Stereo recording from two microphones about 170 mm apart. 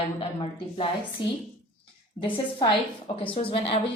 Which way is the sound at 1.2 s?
30° left (ahead or behind).